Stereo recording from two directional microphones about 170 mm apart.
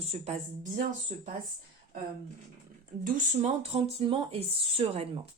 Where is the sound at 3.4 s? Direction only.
35° right (ahead or behind).